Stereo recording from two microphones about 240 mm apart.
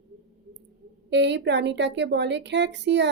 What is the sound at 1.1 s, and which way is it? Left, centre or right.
A woman's voice, right.